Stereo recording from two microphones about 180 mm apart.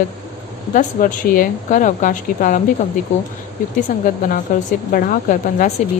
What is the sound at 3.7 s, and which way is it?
Speech, 50° left (ahead or behind).